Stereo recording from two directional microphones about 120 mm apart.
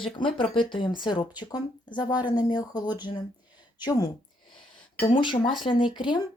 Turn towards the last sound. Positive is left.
turn(degrees=40)  # may be behind; listen again after turning